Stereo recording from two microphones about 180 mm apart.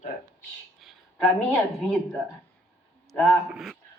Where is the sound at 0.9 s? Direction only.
5° left (ahead or behind).